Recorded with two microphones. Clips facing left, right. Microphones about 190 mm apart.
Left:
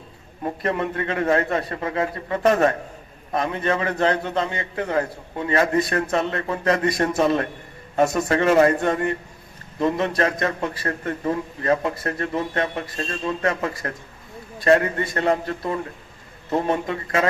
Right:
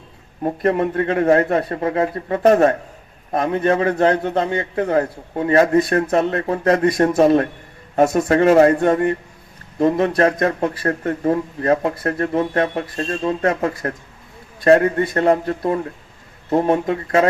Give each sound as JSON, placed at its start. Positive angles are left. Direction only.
{"t": 0.6, "sound": "a man's voice", "side_deg": -45}
{"t": 3.3, "sound": "a man's voice", "side_deg": -50}
{"t": 7.2, "sound": "a man's voice", "side_deg": -35}
{"t": 13.0, "sound": "speech", "side_deg": -35}
{"t": 13.4, "sound": "a man's voice", "side_deg": -45}